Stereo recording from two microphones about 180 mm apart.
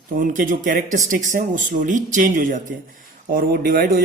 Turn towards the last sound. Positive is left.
turn(degrees=-50)  # may be behind; listen again after turning